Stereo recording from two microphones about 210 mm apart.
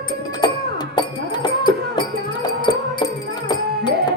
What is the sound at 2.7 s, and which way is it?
Music, 20° left (ahead or behind).